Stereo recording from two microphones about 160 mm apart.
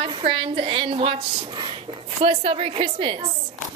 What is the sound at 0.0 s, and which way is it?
Speech, 35° right (ahead or behind).